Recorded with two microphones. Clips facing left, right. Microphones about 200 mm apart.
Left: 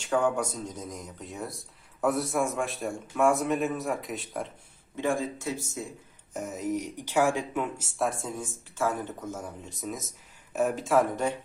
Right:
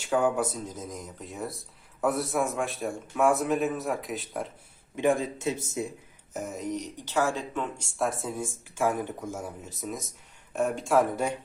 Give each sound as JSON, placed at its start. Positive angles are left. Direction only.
{"t": 0.0, "sound": "speech", "side_deg": -5}
{"t": 4.9, "sound": "speech", "side_deg": -20}
{"t": 6.3, "sound": "speech", "side_deg": 0}
{"t": 8.7, "sound": "speech", "side_deg": -15}